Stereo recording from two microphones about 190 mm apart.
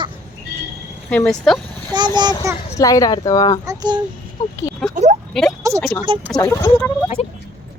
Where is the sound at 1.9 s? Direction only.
20° right (ahead or behind).